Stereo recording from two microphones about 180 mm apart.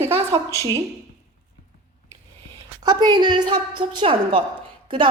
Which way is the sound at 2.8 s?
25° right (ahead or behind).